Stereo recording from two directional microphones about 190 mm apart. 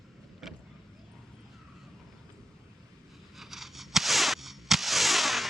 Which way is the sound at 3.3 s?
Centre (ahead or behind).